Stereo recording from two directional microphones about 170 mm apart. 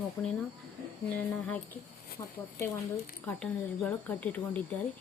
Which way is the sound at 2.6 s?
15° left (ahead or behind).